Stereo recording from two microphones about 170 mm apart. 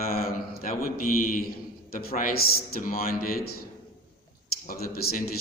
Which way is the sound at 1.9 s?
60° left (ahead or behind).